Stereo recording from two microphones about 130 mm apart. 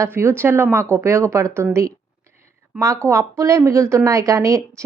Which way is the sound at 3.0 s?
25° right (ahead or behind).